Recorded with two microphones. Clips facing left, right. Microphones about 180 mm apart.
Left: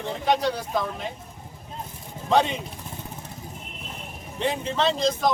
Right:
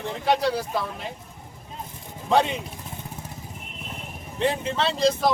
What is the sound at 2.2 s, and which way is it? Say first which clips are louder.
Speech: even; centre (ahead or behind).